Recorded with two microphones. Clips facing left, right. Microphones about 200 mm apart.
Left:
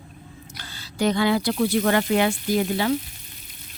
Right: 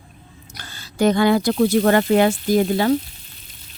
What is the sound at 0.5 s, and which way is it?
Speech, 45° right (ahead or behind).